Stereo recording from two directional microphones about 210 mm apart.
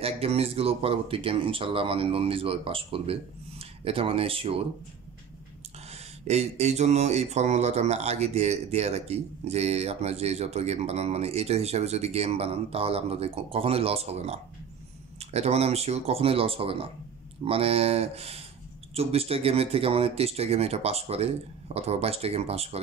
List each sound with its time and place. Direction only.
0.0 s speech: 30° right (ahead or behind)
5.9 s speech: 30° right (ahead or behind)